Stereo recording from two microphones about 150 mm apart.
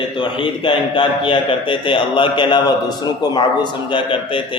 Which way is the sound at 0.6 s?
35° left (ahead or behind).